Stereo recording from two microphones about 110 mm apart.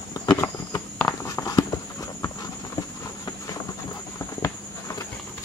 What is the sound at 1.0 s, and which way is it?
Walk, 25° left (ahead or behind).